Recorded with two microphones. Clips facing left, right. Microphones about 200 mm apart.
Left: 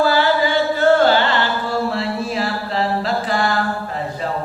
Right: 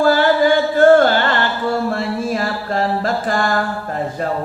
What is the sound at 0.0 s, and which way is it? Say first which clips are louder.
Music: right 3 dB; 50° right (ahead or behind).